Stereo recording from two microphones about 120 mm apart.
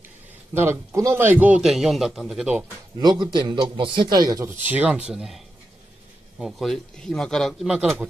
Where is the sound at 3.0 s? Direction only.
40° right (ahead or behind).